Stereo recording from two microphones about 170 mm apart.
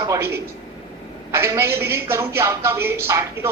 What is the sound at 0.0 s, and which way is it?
A man's voice, 15° right (ahead or behind).